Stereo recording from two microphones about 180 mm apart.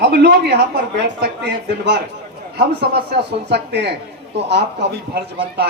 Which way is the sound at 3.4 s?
70° right (ahead or behind).